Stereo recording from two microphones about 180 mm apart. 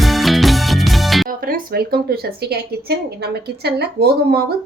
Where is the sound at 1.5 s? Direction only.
55° right (ahead or behind).